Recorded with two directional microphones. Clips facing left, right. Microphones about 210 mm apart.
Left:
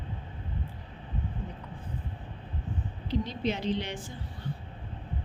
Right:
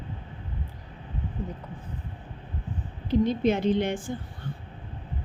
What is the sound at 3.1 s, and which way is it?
A woman's voice, 50° right (ahead or behind).